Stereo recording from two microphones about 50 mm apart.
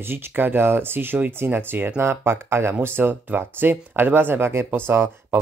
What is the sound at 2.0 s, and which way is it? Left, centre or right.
Speech, right.